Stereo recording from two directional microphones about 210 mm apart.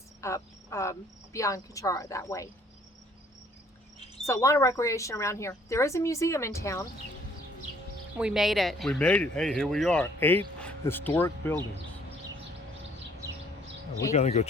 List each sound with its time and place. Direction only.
0.2 s speech: 15° left (ahead or behind)
4.3 s speech: 15° left (ahead or behind)
8.2 s speech: centre (ahead or behind)
14.1 s speech: 30° left (ahead or behind)